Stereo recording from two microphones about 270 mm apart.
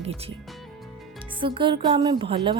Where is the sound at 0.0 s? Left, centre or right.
Right.